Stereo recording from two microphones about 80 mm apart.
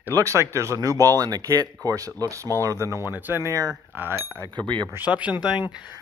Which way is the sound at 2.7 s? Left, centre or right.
Right.